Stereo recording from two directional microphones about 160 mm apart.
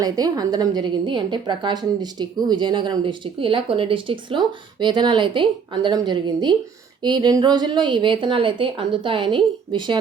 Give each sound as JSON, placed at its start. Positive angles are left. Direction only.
{"t": 0.0, "sound": "a woman's voice", "side_deg": -25}